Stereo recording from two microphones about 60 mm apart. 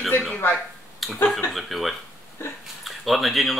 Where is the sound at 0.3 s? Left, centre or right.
Left.